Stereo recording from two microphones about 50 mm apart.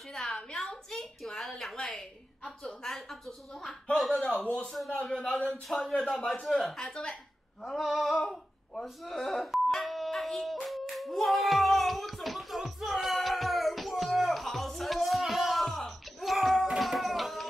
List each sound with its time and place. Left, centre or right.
0.1 s a sound: centre
0.4 s speech: centre
0.7 s a woman's voice: centre
4.1 s speech: left
4.6 s a woman's voice: centre
5.1 s a woman's voice: centre
7.6 s a sound: centre
8.8 s doorbell: centre
16.7 s music: centre